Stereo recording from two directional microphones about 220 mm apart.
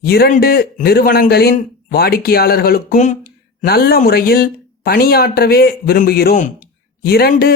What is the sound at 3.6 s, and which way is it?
Speech, 45° left (ahead or behind).